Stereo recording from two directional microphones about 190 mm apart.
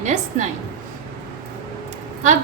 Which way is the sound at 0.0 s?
40° right (ahead or behind).